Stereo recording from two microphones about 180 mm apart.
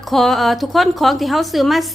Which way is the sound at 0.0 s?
Centre (ahead or behind).